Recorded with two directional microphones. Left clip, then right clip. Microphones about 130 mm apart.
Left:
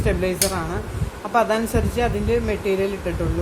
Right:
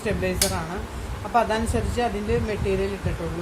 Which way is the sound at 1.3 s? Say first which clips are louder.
Left 3 dB; 45° left (ahead or behind).